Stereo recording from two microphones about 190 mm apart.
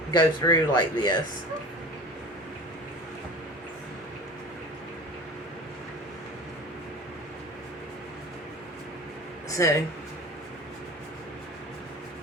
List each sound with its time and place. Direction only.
0.1 s speech: 20° left (ahead or behind)
9.5 s speech: 15° left (ahead or behind)